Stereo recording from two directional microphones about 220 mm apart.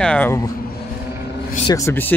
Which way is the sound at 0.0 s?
5° left (ahead or behind).